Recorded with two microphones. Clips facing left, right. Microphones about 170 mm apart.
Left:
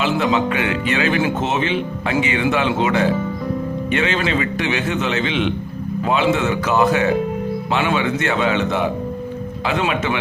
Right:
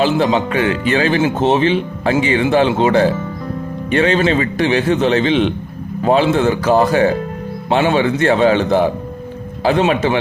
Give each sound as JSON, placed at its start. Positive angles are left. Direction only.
{"t": 0.0, "sound": "speech", "side_deg": -30}